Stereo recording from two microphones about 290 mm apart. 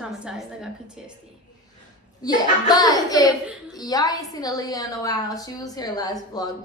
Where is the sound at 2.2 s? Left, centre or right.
Centre.